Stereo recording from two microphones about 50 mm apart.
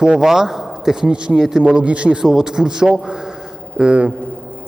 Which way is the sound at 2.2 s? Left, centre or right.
Centre.